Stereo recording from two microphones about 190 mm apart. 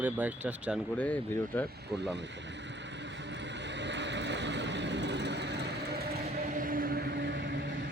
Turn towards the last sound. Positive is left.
turn(degrees=-65)  # may be behind; listen again after turning